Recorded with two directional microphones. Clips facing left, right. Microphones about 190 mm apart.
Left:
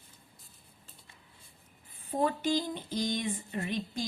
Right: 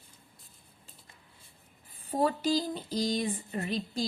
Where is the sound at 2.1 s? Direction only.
35° right (ahead or behind).